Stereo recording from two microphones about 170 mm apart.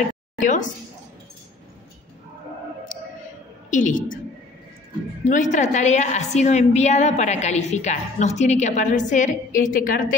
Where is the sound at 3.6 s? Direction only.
50° left (ahead or behind).